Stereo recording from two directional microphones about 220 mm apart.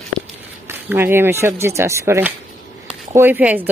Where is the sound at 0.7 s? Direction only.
10° right (ahead or behind).